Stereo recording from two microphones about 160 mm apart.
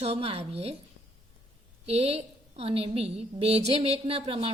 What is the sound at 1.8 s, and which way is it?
A woman's voice, 40° right (ahead or behind).